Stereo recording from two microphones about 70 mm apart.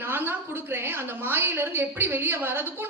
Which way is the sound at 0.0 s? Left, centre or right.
Right.